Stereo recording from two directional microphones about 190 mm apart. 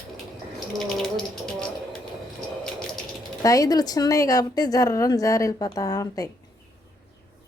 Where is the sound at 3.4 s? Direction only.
20° left (ahead or behind).